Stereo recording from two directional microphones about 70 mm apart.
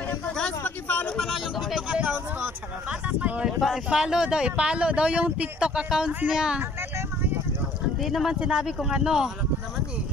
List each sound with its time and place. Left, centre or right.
0.7 s hubbub: left
1.1 s vehicle: centre
1.9 s speech: centre
3.4 s speech: centre
8.0 s speech: centre
8.4 s speech: centre